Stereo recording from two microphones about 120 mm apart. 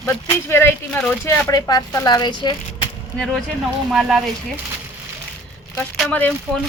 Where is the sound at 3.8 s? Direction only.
Centre (ahead or behind).